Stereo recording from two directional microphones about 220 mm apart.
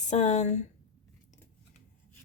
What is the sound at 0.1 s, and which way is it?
Speech, 30° left (ahead or behind).